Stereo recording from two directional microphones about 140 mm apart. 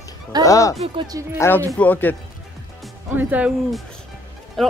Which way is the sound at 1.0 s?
25° right (ahead or behind).